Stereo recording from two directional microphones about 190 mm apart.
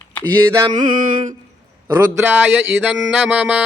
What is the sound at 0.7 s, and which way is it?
Music, 40° right (ahead or behind).